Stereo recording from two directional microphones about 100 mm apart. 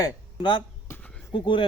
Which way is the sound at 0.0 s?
50° left (ahead or behind).